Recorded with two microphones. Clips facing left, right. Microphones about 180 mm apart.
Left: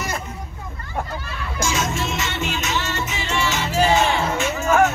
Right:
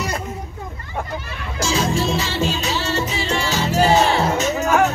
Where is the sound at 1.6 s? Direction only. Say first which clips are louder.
Right 4 dB; 35° right (ahead or behind).